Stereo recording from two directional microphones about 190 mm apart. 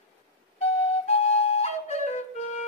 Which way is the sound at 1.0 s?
35° left (ahead or behind).